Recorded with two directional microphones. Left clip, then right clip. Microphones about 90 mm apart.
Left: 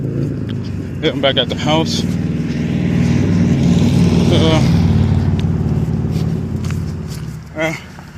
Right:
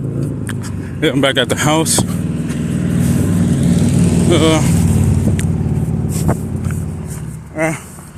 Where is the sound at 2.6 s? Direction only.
30° right (ahead or behind).